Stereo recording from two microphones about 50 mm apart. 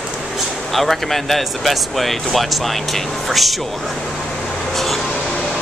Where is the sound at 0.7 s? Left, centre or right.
Centre.